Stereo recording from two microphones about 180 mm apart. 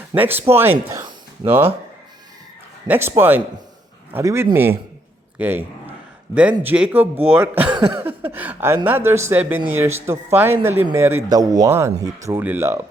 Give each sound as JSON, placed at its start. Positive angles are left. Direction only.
{"t": 0.1, "sound": "speech", "side_deg": -10}
{"t": 2.8, "sound": "a man's voice", "side_deg": -10}